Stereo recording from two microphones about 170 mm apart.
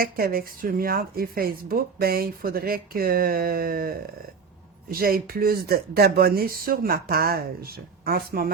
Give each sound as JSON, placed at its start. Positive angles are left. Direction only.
{"t": 0.0, "sound": "speech", "side_deg": -60}